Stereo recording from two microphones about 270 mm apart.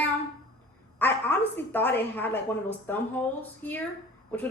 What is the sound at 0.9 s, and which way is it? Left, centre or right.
A woman's voice, centre.